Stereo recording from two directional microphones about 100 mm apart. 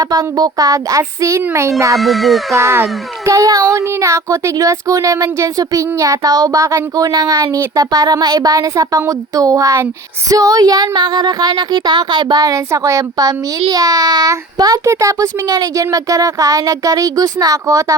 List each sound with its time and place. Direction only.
0.0 s a child's voice: 35° right (ahead or behind)
2.0 s speech: centre (ahead or behind)
2.6 s a child's voice: 30° right (ahead or behind)